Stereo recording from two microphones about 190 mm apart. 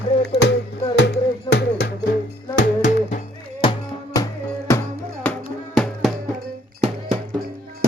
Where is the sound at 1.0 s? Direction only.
60° left (ahead or behind).